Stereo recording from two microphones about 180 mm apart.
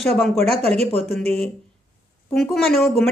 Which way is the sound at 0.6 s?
35° right (ahead or behind).